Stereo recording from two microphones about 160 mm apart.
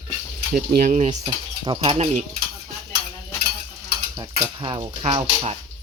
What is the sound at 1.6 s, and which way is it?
Speech, 30° right (ahead or behind).